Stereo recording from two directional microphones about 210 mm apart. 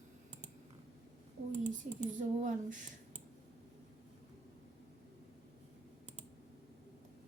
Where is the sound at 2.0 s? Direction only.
35° right (ahead or behind).